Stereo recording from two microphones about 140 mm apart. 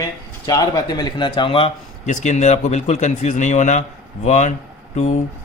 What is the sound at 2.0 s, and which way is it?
Speech, 55° left (ahead or behind).